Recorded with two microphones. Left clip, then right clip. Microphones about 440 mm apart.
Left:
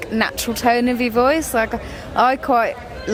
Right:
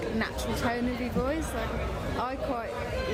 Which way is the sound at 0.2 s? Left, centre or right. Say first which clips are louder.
Left 15 dB; left.